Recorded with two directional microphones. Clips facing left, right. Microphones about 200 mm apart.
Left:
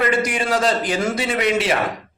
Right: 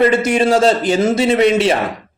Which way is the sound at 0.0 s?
25° right (ahead or behind).